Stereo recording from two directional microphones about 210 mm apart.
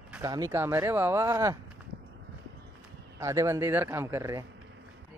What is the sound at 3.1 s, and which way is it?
Speech, 15° right (ahead or behind).